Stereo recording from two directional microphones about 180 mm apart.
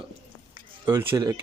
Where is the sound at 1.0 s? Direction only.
15° right (ahead or behind).